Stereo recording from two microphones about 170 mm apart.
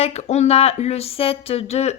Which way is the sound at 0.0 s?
40° left (ahead or behind).